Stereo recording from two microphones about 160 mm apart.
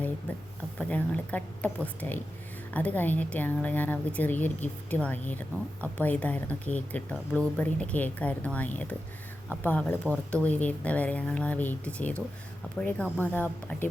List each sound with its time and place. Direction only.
0.3 s a woman's voice: 10° left (ahead or behind)